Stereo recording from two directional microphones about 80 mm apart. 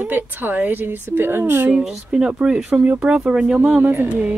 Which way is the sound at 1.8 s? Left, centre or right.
Centre.